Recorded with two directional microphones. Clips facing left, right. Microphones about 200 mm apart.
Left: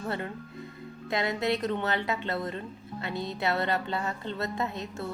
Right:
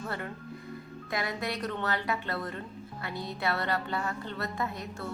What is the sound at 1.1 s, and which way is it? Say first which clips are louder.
A woman's voice: left 5 dB; 25° left (ahead or behind).